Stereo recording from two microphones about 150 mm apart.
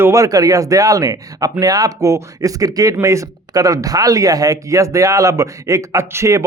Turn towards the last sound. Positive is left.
turn(degrees=-20)  # may be behind; listen again after turning